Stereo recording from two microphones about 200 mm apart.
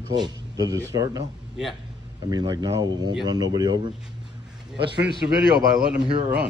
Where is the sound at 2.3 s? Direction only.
20° right (ahead or behind).